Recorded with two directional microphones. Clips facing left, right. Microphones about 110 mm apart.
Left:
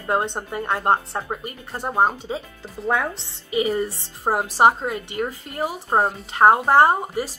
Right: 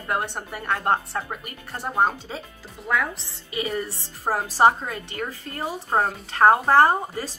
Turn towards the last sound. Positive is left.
turn(degrees=15)  # may be behind; listen again after turning